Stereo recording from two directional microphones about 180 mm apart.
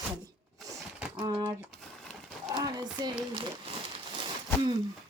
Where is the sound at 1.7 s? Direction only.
Centre (ahead or behind).